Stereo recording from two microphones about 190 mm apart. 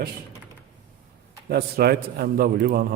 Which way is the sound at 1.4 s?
55° right (ahead or behind).